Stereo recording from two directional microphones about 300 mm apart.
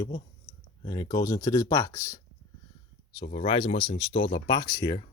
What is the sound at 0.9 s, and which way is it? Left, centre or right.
Speech, centre.